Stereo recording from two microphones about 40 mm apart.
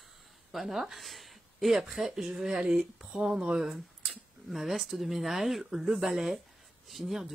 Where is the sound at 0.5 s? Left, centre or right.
Centre.